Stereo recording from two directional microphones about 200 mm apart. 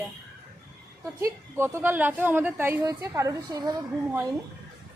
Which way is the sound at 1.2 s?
10° right (ahead or behind).